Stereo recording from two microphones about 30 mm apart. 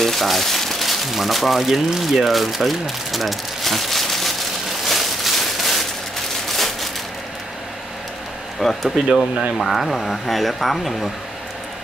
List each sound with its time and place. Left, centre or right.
0.0 s crumpling: centre
1.1 s speech: centre
4.8 s a sound: centre
8.8 s speech: centre
9.7 s speech: centre